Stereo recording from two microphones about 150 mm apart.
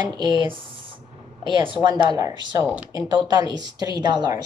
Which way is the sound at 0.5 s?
35° right (ahead or behind).